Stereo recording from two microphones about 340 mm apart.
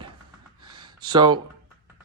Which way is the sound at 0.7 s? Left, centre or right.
Centre.